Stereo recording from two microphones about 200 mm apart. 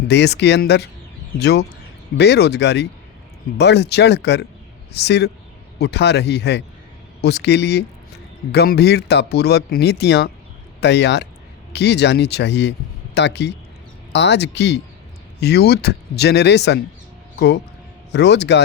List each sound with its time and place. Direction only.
0.1 s speech: 55° left (ahead or behind)
18.1 s speech: 60° left (ahead or behind)